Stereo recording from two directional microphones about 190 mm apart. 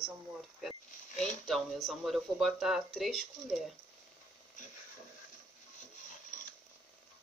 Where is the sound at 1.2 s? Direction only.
Centre (ahead or behind).